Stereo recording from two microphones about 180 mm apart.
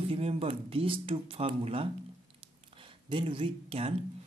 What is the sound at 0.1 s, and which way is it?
Speech, 35° right (ahead or behind).